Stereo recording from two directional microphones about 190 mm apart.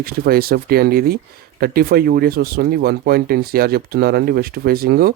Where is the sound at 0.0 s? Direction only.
55° right (ahead or behind).